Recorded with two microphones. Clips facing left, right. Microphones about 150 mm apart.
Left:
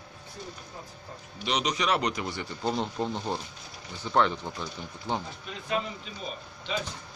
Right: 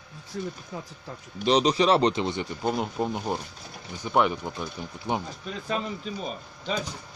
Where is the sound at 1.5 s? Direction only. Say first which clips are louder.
Right 7 dB; 30° right (ahead or behind); by 5.2 s 15° right (ahead or behind).